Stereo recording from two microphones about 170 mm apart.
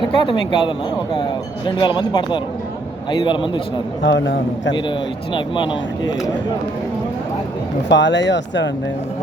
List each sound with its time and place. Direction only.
0.2 s speech: 30° left (ahead or behind)
4.0 s speech: 90° left
5.3 s speech: 30° left (ahead or behind)
7.9 s speech: 90° left